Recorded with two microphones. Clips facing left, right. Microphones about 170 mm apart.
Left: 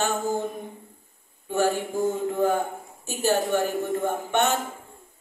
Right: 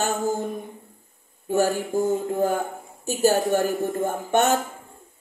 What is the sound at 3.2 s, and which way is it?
Music, 40° right (ahead or behind).